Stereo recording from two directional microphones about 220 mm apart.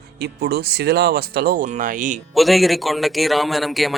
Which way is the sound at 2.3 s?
Centre (ahead or behind).